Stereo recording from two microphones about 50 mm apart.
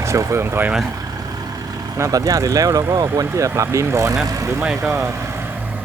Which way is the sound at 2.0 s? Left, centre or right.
Right.